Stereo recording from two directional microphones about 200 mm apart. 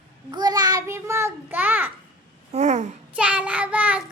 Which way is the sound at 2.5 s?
35° right (ahead or behind).